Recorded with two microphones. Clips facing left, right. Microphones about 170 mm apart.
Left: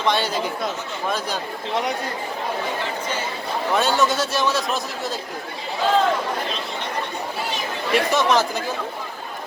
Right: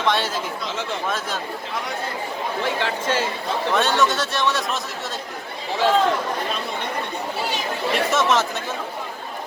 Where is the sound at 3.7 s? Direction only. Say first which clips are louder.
Left 1 dB; centre (ahead or behind).